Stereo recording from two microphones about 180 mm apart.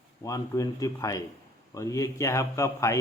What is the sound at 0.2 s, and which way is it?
Speech, 20° left (ahead or behind).